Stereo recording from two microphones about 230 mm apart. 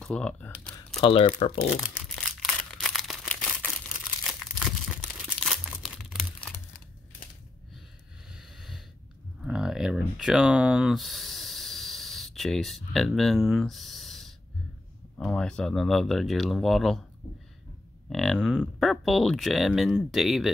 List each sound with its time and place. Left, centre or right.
0.0 s typing: centre
1.0 s speech: left
1.8 s crumpling: centre
8.3 s a sound: centre
15.1 s speech: centre
18.1 s speech: centre